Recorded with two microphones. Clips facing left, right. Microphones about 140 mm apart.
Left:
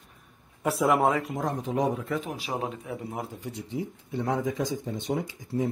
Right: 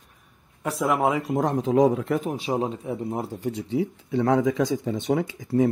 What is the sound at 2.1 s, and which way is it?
Speech, 40° right (ahead or behind).